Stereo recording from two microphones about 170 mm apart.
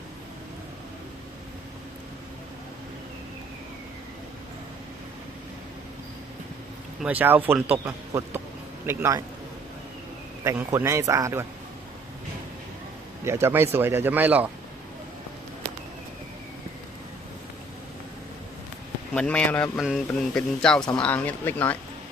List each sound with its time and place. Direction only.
7.0 s a man's voice: 10° right (ahead or behind)
10.4 s a man's voice: 15° right (ahead or behind)
13.2 s a man's voice: 15° right (ahead or behind)
19.1 s speech: 5° left (ahead or behind)